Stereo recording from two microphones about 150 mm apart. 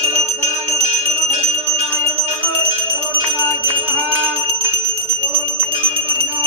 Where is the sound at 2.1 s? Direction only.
40° right (ahead or behind).